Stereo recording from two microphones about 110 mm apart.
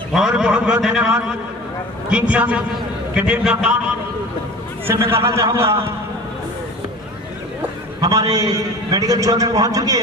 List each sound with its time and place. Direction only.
0.1 s a man's voice: 5° right (ahead or behind)
4.8 s a man's voice: 20° right (ahead or behind)
8.0 s a man's voice: 35° right (ahead or behind)